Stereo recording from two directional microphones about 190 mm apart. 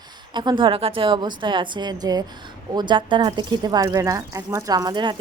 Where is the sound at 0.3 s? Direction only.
25° right (ahead or behind).